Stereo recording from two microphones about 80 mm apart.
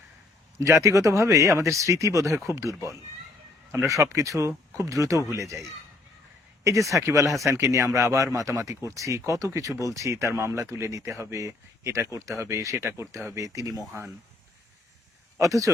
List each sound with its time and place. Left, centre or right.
0.9 s speech: right
6.7 s speech: right
15.4 s speech: right